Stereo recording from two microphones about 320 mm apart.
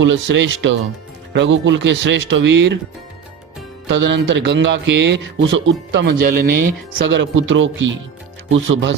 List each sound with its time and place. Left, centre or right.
0.0 s a man's voice: right
3.9 s a man's voice: right